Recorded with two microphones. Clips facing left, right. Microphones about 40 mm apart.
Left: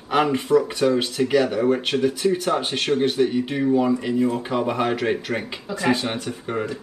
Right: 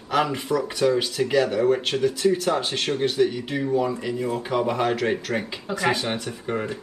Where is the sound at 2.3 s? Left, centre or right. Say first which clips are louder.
Left 1 dB; left.